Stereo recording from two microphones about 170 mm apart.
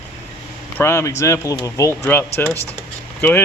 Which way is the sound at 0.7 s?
15° left (ahead or behind).